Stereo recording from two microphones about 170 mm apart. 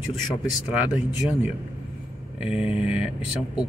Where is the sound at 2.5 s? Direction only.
5° right (ahead or behind).